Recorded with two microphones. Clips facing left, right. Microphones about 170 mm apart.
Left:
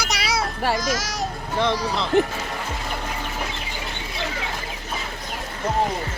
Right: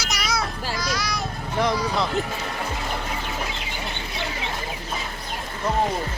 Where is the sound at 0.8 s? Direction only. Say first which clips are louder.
Left 2 dB; 45° left (ahead or behind).